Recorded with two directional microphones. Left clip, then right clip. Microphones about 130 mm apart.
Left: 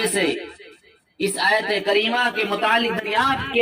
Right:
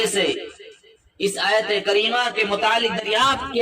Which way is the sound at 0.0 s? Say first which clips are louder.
Right 1 dB; 15° right (ahead or behind).